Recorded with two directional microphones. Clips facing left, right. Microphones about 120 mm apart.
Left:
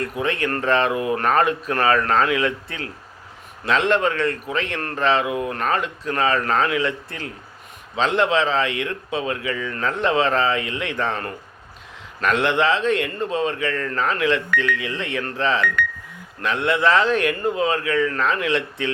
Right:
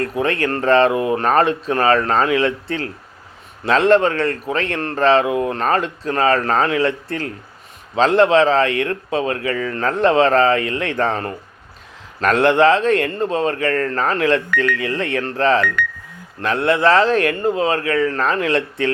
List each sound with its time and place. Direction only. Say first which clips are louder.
0.0 s a man's voice: right 4 dB; 40° right (ahead or behind)